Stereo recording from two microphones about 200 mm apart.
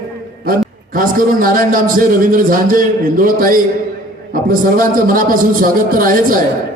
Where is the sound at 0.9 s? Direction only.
45° right (ahead or behind).